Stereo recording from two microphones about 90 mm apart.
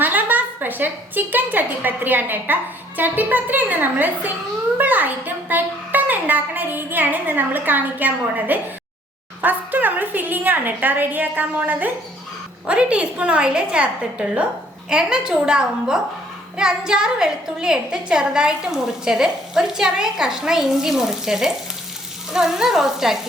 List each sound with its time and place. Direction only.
0.0 s a woman's voice: 20° right (ahead or behind)
22.3 s frying: 5° right (ahead or behind)